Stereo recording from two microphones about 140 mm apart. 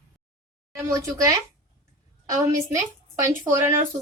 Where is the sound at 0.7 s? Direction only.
20° right (ahead or behind).